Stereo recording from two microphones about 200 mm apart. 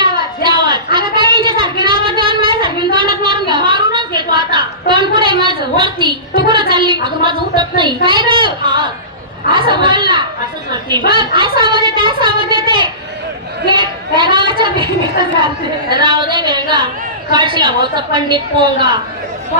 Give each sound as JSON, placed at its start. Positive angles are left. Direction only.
{"t": 0.0, "sound": "a sound", "side_deg": -20}
{"t": 6.5, "sound": "a woman's voice", "side_deg": -25}
{"t": 15.9, "sound": "a woman's voice", "side_deg": -25}